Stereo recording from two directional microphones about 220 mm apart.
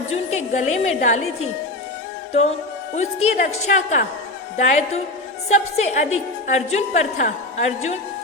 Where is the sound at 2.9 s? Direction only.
30° left (ahead or behind).